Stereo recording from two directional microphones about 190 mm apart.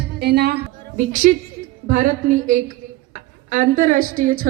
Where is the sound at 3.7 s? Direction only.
45° right (ahead or behind).